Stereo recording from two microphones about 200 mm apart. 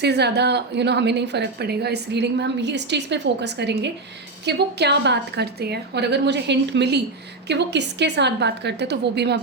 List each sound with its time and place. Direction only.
0.0 s a woman's voice: 55° right (ahead or behind)